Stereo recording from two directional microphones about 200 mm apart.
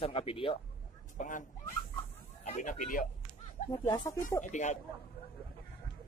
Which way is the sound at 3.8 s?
15° left (ahead or behind).